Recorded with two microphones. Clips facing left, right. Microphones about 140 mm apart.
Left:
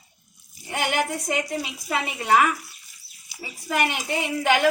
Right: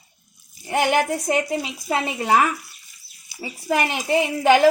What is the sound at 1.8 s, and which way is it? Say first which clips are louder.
Speech: right 4 dB; 35° right (ahead or behind).